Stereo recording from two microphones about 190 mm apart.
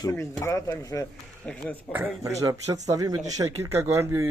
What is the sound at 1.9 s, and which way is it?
Speech, 15° right (ahead or behind).